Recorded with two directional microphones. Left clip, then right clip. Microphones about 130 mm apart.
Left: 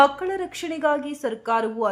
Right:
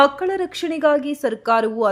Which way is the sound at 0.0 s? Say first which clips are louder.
Right 2 dB; 30° right (ahead or behind).